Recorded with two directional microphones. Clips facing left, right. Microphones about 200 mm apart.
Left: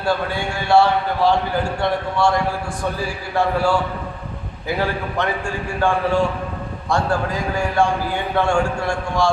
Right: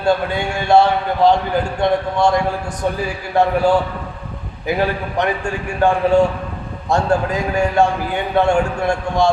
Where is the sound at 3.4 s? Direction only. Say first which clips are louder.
Right 4 dB; 20° right (ahead or behind).